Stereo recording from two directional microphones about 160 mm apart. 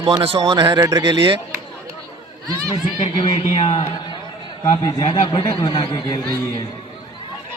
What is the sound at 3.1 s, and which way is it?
A man's voice, 35° left (ahead or behind).